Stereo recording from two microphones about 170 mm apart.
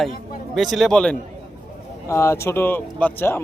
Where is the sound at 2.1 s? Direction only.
15° left (ahead or behind).